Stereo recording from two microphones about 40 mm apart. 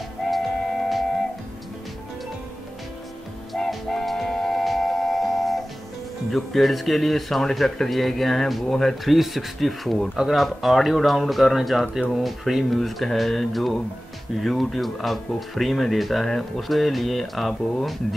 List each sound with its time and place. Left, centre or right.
0.2 s music: centre
3.5 s music: centre
6.3 s speech: centre
9.0 s speech: centre